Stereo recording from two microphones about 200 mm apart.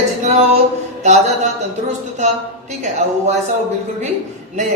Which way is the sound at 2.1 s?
35° right (ahead or behind).